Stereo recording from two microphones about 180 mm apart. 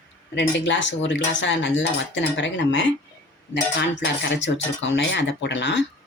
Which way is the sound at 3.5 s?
75° left (ahead or behind).